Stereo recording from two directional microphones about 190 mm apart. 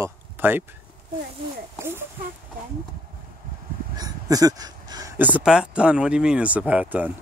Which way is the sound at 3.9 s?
20° right (ahead or behind).